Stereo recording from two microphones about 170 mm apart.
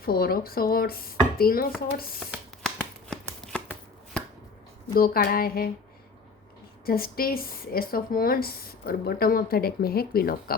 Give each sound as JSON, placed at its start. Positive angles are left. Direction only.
{"t": 0.0, "sound": "speech", "side_deg": 60}
{"t": 2.6, "sound": "a sound", "side_deg": 5}
{"t": 4.9, "sound": "speech", "side_deg": 60}
{"t": 6.8, "sound": "speech", "side_deg": 60}